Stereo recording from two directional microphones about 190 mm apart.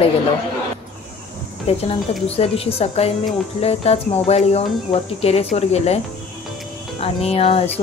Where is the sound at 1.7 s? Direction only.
35° left (ahead or behind).